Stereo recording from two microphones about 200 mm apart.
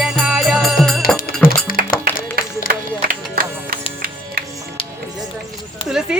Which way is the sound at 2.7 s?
45° right (ahead or behind).